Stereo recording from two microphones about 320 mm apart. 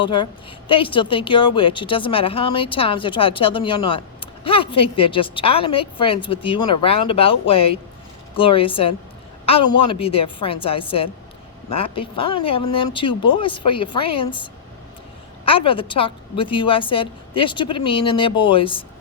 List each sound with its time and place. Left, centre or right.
0.0 s a woman's voice: centre